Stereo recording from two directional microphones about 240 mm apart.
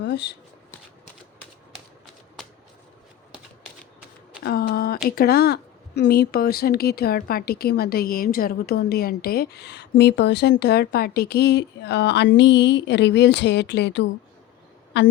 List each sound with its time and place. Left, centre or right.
0.0 s speech: left
4.4 s a woman's voice: left